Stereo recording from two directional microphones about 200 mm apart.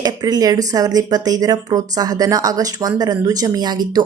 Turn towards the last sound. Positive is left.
turn(degrees=-20)  # may be behind; listen again after turning